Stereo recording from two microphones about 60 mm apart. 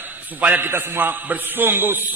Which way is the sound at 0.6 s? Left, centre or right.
Right.